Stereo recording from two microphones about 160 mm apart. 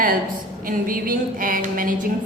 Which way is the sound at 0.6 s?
65° right (ahead or behind).